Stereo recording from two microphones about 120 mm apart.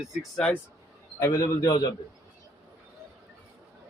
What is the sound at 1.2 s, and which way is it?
Speech, 25° left (ahead or behind).